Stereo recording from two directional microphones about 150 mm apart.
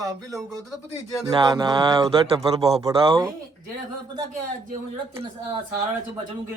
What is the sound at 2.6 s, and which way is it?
Speech, 40° right (ahead or behind).